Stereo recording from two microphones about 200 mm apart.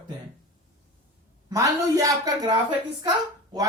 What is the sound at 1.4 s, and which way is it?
Speech, 15° right (ahead or behind).